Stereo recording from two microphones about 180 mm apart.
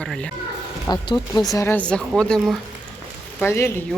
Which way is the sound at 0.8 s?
25° left (ahead or behind).